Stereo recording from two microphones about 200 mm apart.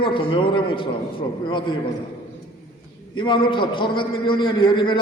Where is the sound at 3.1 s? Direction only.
25° left (ahead or behind).